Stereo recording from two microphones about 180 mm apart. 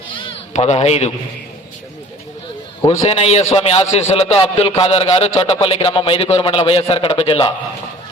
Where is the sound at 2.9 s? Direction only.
35° left (ahead or behind).